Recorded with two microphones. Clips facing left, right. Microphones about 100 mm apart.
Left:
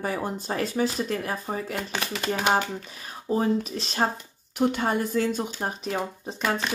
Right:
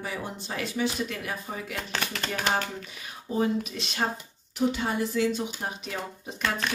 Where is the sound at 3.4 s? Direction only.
35° left (ahead or behind).